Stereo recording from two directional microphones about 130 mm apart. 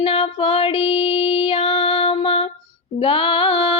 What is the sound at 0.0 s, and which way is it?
Female singing, 45° left (ahead or behind).